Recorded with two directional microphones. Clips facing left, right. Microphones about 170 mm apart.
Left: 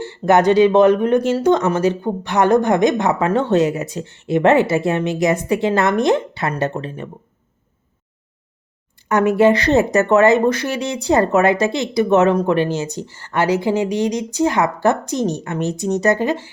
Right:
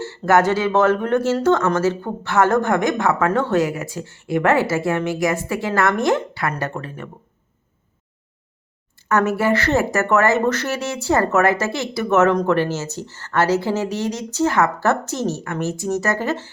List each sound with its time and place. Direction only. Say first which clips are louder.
0.0 s a woman's voice: left 2 dB; 15° left (ahead or behind)
9.0 s speech: left 5 dB; 15° left (ahead or behind)